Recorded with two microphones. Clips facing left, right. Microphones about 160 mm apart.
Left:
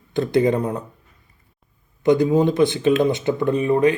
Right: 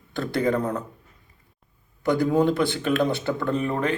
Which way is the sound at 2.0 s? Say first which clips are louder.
Left 4 dB; 20° left (ahead or behind).